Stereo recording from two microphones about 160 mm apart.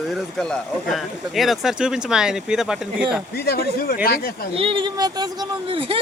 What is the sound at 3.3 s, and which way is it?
Speech, 75° left (ahead or behind).